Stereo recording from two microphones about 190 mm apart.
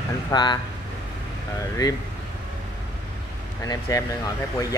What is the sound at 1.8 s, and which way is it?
Speech, 20° left (ahead or behind).